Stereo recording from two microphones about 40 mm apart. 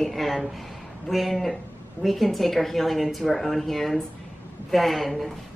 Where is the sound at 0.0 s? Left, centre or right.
Centre.